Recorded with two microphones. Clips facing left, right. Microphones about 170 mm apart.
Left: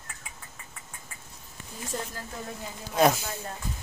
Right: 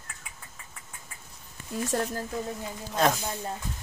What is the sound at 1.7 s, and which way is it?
Speech, 75° right (ahead or behind).